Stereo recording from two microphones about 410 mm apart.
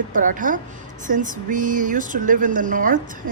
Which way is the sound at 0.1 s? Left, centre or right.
Centre.